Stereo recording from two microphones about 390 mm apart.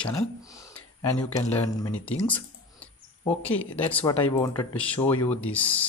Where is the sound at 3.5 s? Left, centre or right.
Centre.